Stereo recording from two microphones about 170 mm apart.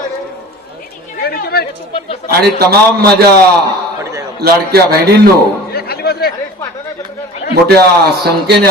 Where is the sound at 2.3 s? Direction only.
70° right (ahead or behind).